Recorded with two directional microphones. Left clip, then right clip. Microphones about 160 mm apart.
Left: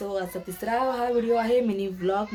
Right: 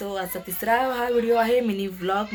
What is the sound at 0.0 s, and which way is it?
Speech, centre (ahead or behind).